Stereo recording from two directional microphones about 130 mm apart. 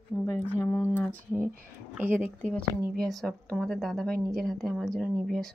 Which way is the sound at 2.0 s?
15° right (ahead or behind).